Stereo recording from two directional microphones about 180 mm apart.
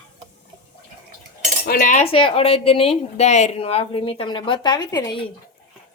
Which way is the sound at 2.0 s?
30° left (ahead or behind).